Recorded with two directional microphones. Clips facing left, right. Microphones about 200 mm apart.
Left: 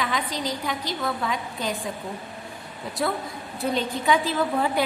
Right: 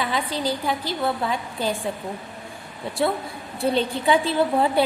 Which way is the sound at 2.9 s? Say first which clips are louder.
Right 3 dB; 30° right (ahead or behind).